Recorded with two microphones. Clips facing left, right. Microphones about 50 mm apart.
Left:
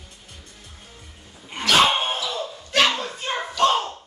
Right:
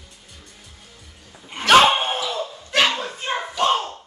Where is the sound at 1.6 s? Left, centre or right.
Right.